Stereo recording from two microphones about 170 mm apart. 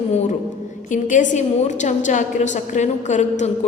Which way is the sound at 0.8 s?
50° left (ahead or behind).